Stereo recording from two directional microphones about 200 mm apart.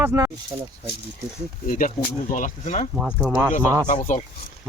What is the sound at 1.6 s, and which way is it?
Speech, 40° left (ahead or behind).